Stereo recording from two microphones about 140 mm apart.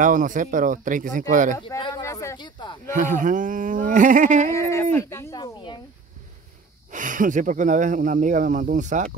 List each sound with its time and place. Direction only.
0.0 s speech: 70° right (ahead or behind)
1.8 s speech: 30° left (ahead or behind)
2.0 s a sound: 20° left (ahead or behind)
2.3 s speech: 35° left (ahead or behind)
2.9 s speech: 65° right (ahead or behind)
4.5 s speech: 20° left (ahead or behind)
5.4 s snake: 35° left (ahead or behind)
6.9 s speech: 70° right (ahead or behind)